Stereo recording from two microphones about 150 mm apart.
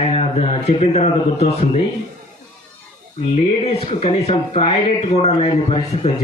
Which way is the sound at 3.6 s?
45° left (ahead or behind).